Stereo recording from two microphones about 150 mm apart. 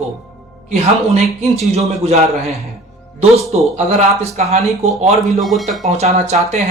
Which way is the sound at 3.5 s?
45° right (ahead or behind).